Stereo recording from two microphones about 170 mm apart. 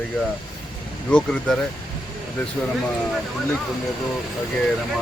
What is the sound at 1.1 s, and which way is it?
Speech, centre (ahead or behind).